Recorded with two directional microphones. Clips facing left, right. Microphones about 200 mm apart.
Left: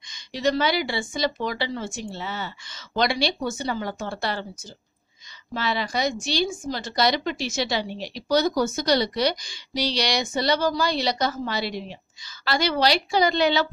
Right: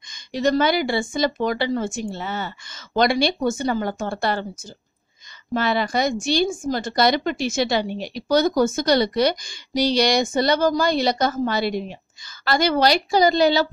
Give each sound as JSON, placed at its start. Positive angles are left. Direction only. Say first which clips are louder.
{"t": 0.1, "sound": "a woman's voice", "louder": "right 4 dB", "side_deg": -50}
{"t": 5.5, "sound": "a woman's voice", "louder": "right 5 dB", "side_deg": -50}